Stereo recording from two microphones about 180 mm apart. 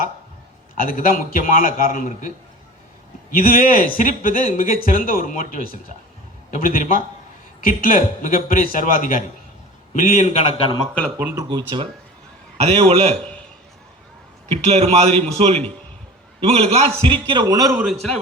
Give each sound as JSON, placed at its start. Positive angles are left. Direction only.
{"t": 0.8, "sound": "speech", "side_deg": 50}
{"t": 3.3, "sound": "a man's voice", "side_deg": 50}
{"t": 11.2, "sound": "speech", "side_deg": -10}
{"t": 11.4, "sound": "a man's voice", "side_deg": -25}
{"t": 14.5, "sound": "a man's voice", "side_deg": -35}